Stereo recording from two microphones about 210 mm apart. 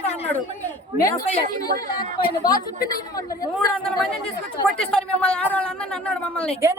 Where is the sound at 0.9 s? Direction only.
15° left (ahead or behind).